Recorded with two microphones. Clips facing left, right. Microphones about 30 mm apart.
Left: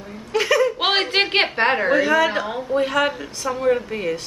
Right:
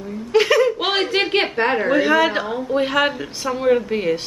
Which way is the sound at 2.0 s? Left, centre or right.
Centre.